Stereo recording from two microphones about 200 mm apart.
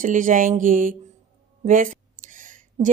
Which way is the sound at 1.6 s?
40° right (ahead or behind).